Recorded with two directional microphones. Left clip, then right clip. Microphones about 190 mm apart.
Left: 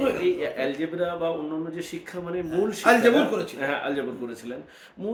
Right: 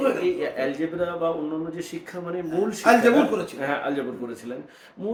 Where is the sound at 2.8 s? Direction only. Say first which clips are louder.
Right 1 dB; 15° left (ahead or behind).